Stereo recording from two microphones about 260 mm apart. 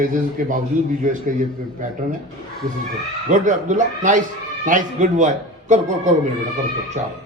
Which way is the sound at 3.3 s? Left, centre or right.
Right.